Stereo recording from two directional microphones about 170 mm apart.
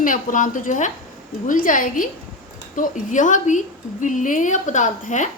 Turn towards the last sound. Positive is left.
turn(degrees=45)  # may be behind; listen again after turning